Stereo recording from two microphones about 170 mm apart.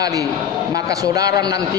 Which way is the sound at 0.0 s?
20° right (ahead or behind).